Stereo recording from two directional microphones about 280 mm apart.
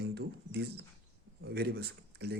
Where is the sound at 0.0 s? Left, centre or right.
Right.